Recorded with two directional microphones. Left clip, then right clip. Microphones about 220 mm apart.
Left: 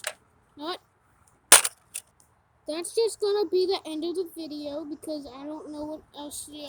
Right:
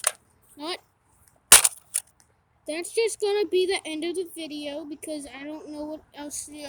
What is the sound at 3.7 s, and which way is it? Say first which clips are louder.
Speech: right 1 dB; 20° right (ahead or behind).